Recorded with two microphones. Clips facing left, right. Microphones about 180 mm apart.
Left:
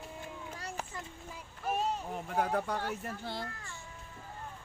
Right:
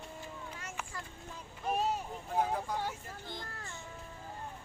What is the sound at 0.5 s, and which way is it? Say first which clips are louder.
Children playing: left 3 dB; 35° left (ahead or behind).